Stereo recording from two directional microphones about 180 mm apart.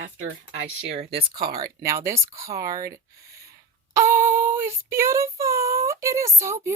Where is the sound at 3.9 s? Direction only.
15° right (ahead or behind).